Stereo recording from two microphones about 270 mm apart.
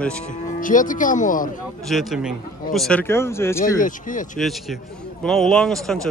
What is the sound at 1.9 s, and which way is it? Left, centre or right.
Speech, centre.